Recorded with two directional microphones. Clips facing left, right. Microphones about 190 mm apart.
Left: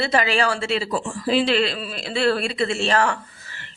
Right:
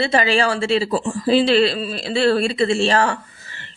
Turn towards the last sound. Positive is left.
turn(degrees=-30)  # may be behind; listen again after turning